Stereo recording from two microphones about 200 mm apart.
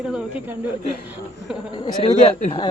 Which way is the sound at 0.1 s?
5° right (ahead or behind).